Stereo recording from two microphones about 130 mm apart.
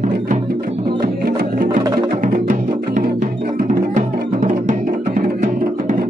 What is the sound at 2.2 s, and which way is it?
Music, 90° right.